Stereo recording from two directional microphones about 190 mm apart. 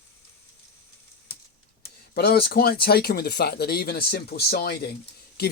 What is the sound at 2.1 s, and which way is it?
Speech, 55° left (ahead or behind).